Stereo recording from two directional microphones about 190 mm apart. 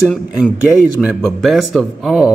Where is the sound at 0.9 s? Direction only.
Centre (ahead or behind).